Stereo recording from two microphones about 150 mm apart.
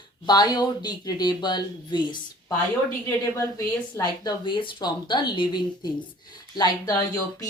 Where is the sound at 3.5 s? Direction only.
25° left (ahead or behind).